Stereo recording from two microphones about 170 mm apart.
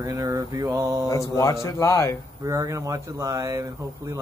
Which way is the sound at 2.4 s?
20° right (ahead or behind).